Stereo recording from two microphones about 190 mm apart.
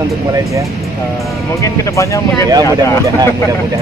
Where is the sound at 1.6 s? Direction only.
15° left (ahead or behind).